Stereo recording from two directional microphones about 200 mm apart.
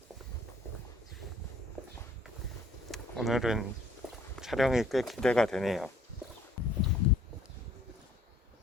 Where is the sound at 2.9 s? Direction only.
Centre (ahead or behind).